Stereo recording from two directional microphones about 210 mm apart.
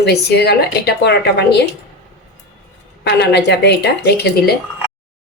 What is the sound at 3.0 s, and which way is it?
Speech, 55° left (ahead or behind).